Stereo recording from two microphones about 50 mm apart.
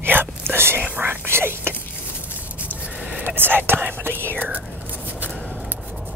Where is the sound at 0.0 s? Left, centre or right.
Right.